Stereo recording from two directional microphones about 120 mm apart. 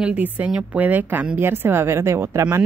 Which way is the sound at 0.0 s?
10° right (ahead or behind).